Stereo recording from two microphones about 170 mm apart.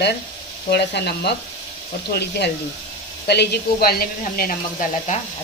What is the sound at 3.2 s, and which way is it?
Speech, 75° left (ahead or behind).